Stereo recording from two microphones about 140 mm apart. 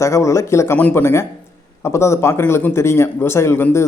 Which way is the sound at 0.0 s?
20° left (ahead or behind).